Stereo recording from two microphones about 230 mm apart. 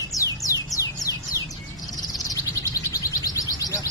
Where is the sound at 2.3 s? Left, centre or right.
Centre.